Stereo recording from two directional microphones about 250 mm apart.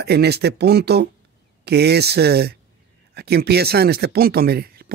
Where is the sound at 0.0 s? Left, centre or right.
Right.